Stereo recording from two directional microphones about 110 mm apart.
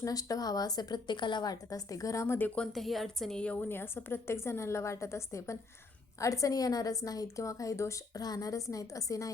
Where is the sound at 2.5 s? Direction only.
Centre (ahead or behind).